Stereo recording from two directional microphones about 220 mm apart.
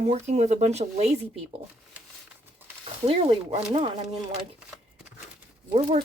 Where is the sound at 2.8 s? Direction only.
25° right (ahead or behind).